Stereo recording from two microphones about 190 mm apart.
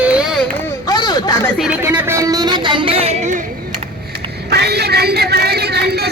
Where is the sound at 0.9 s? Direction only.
20° left (ahead or behind).